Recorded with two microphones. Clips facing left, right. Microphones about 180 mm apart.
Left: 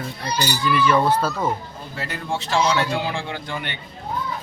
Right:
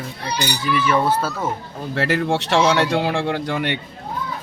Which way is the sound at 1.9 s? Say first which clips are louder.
Right 9 dB; 75° right (ahead or behind).